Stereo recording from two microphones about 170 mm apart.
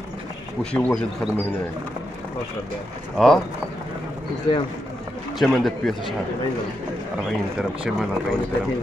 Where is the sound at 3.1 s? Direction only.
5° left (ahead or behind).